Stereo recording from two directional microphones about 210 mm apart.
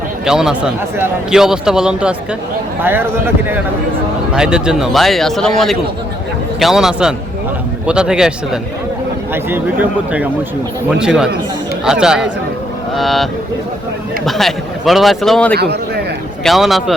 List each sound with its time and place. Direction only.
0.3 s a man's voice: 5° right (ahead or behind)
9.3 s a man's voice: 10° right (ahead or behind)
14.3 s a man's voice: centre (ahead or behind)
15.5 s a sound: 50° right (ahead or behind)
16.4 s a man's voice: centre (ahead or behind)